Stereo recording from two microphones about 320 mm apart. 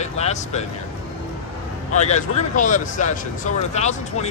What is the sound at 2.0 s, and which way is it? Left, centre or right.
Speech, left.